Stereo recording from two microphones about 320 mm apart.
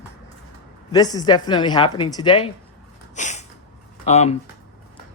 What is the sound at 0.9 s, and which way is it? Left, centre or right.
Speech, centre.